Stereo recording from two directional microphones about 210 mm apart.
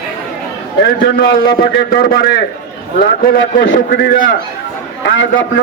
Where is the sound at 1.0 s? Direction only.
45° left (ahead or behind).